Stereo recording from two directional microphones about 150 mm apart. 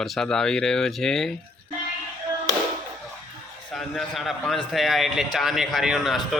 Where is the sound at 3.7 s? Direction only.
Centre (ahead or behind).